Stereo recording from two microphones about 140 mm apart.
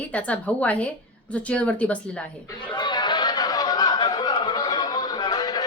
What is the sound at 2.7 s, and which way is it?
Chatter, 30° left (ahead or behind).